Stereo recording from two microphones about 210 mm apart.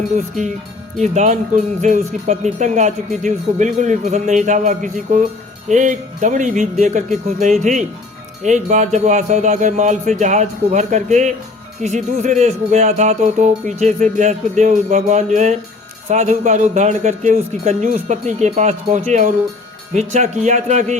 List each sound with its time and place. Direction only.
0.9 s speech: 35° right (ahead or behind)